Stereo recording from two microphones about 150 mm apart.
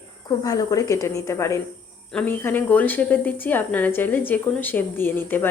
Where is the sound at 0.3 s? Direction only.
25° left (ahead or behind).